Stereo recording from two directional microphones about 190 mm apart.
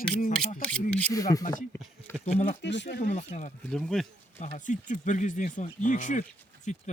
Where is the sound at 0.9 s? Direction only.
15° left (ahead or behind).